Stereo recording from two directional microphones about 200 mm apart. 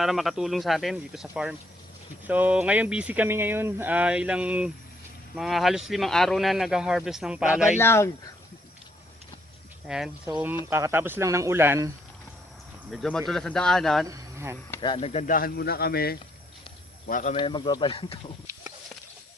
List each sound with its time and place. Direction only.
0.0 s speech: centre (ahead or behind)
7.8 s speech: 15° left (ahead or behind)
9.8 s speech: 5° right (ahead or behind)
12.9 s speech: centre (ahead or behind)
14.1 s speech: 15° right (ahead or behind)
14.8 s speech: 25° left (ahead or behind)
17.3 s speech: 25° left (ahead or behind)